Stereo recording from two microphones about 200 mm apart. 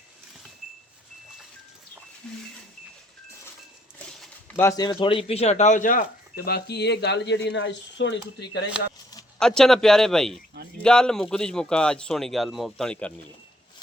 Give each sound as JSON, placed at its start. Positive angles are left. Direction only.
{"t": 2.2, "sound": "speech", "side_deg": 5}
{"t": 3.9, "sound": "speech", "side_deg": 10}
{"t": 9.4, "sound": "speech", "side_deg": 5}